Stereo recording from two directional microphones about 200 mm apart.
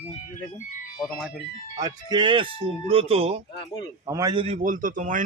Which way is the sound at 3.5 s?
25° left (ahead or behind).